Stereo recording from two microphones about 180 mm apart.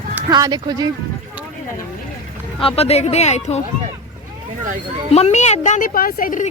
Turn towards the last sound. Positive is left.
turn(degrees=50)  # may be behind; listen again after turning